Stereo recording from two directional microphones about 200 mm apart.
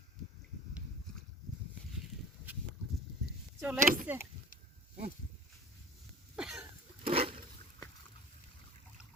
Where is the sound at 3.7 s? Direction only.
40° right (ahead or behind).